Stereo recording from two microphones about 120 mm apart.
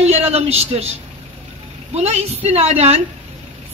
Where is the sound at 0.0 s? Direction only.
60° right (ahead or behind).